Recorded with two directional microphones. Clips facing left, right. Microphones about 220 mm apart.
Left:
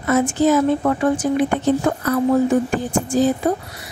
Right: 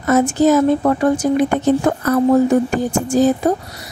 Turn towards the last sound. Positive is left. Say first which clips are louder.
# right 3 dB
turn(degrees=-40)  # may be behind; listen again after turning